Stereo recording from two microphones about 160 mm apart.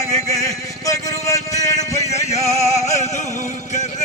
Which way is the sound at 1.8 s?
45° left (ahead or behind).